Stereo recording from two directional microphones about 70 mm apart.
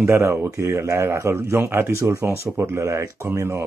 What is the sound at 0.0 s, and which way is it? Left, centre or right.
Speech, right.